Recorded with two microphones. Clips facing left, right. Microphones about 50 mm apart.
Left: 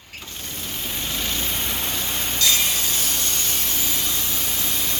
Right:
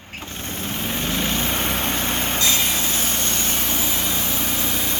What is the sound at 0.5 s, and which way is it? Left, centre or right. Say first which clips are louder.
Vehicle: right 5 dB; right.